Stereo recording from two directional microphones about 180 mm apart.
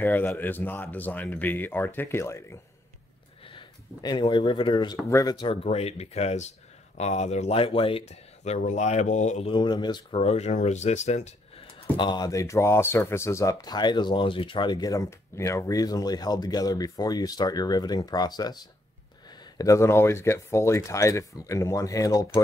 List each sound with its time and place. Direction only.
0.0 s speech: 10° left (ahead or behind)
3.4 s speech: 25° left (ahead or behind); by 9.5 s 40° left (ahead or behind)
9.5 s speech: 25° left (ahead or behind)
12.0 s speech: 25° left (ahead or behind)
19.6 s speech: 15° left (ahead or behind)